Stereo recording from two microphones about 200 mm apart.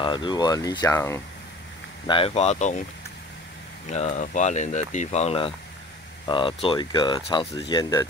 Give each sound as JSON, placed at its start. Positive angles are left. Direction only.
{"t": 0.0, "sound": "speech", "side_deg": 25}
{"t": 2.0, "sound": "speech", "side_deg": 25}
{"t": 3.9, "sound": "speech", "side_deg": 35}